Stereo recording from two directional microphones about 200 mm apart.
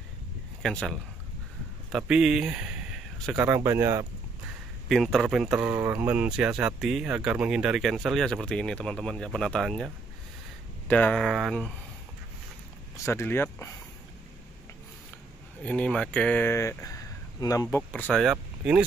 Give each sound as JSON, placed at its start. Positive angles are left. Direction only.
{"t": 0.6, "sound": "speech", "side_deg": 0}
{"t": 4.8, "sound": "speech", "side_deg": 0}
{"t": 10.9, "sound": "speech", "side_deg": 5}
{"t": 12.9, "sound": "a sound", "side_deg": 10}
{"t": 15.6, "sound": "speech", "side_deg": 5}
{"t": 18.0, "sound": "speech", "side_deg": -5}